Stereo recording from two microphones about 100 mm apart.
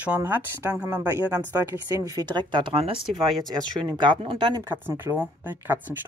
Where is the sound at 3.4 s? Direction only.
40° right (ahead or behind).